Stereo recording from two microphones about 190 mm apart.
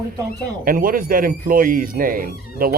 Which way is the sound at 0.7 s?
45° right (ahead or behind).